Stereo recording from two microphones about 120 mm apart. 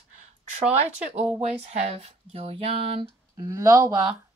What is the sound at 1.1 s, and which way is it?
Speech, 65° right (ahead or behind).